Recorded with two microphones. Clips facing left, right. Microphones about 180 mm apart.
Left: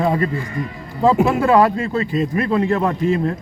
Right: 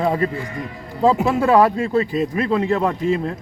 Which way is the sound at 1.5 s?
10° right (ahead or behind).